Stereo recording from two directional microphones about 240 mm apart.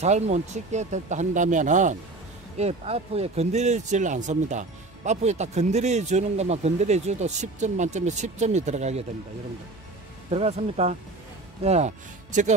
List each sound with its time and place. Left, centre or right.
0.0 s a man's voice: right
10.3 s a man's voice: right